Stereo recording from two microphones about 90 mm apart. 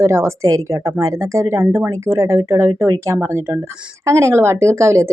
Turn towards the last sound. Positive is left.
turn(degrees=-30)  # may be behind; listen again after turning